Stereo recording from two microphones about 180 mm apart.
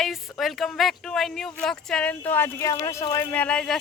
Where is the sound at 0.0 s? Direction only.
Centre (ahead or behind).